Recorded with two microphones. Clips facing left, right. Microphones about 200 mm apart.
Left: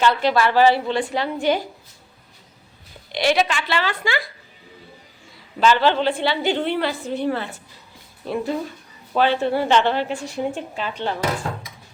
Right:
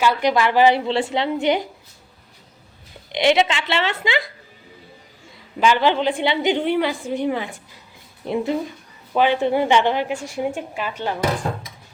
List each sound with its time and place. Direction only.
0.0 s a woman's voice: 15° right (ahead or behind)
3.1 s a woman's voice: 20° right (ahead or behind)
5.5 s a woman's voice: 15° right (ahead or behind)